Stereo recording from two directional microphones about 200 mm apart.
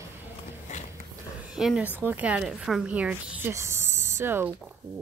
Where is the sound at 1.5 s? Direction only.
5° right (ahead or behind).